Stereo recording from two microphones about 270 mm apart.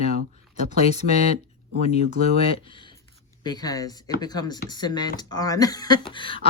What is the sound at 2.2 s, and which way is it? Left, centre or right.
Speech, centre.